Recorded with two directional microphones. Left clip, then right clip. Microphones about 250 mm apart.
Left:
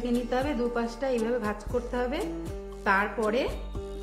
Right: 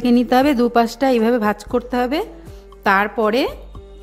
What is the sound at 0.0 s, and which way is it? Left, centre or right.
A woman's voice, right.